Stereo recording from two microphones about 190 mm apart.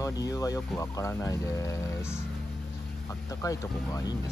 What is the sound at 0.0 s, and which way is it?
Speech, 15° left (ahead or behind).